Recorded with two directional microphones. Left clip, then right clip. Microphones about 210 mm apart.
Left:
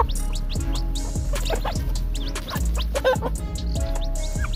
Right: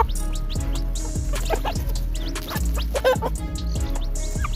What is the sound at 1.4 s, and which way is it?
Music, 45° right (ahead or behind).